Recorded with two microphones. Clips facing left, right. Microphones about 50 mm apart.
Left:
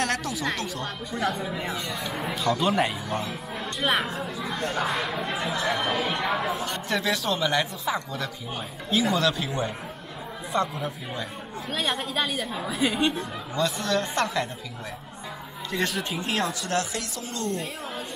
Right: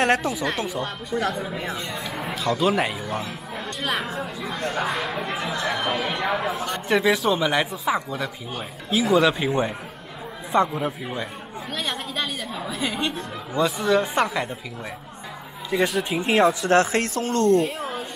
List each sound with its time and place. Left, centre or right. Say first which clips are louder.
0.0 s speech: right 6 dB; right
1.1 s speech: right 2 dB; centre
6.9 s speech: right 7 dB; centre
9.3 s speech: right 5 dB; right
11.7 s speech: left 1 dB; centre
13.6 s speech: right 5 dB; centre
15.7 s speech: right 6 dB; centre
16.2 s speech: right 11 dB; right